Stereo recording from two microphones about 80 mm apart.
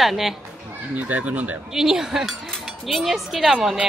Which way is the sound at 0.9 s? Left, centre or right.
Right.